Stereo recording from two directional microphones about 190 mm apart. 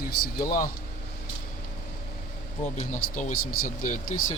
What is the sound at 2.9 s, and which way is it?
Speech, 40° left (ahead or behind).